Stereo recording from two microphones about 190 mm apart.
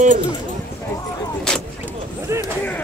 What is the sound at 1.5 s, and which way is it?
Vehicle, 5° left (ahead or behind).